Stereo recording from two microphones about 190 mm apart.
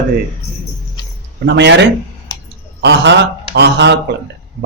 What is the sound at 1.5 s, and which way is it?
A man's voice, 65° right (ahead or behind).